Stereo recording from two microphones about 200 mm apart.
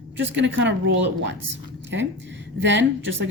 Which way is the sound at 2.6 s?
65° right (ahead or behind).